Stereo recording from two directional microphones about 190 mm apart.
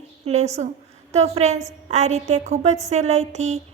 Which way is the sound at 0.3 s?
35° right (ahead or behind).